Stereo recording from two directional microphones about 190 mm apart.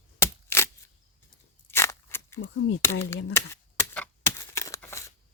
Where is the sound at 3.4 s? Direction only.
15° left (ahead or behind).